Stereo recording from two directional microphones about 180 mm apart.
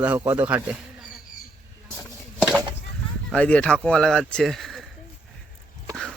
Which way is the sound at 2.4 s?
5° right (ahead or behind).